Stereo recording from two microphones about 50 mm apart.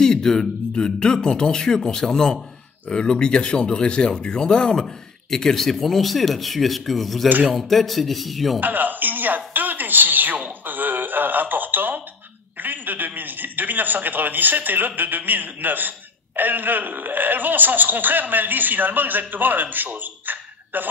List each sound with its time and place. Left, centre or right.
0.0 s speech: centre
8.5 s a woman's voice: right